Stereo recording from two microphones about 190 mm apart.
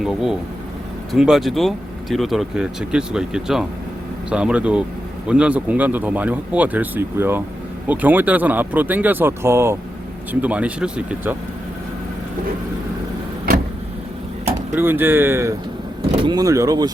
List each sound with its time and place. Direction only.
0.0 s speech: centre (ahead or behind)
14.8 s speech: 10° right (ahead or behind)